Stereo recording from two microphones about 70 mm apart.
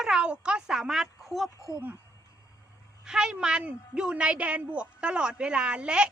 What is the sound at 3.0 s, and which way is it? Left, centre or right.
A woman's voice, centre.